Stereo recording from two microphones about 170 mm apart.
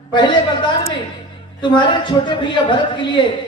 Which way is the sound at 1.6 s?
25° left (ahead or behind).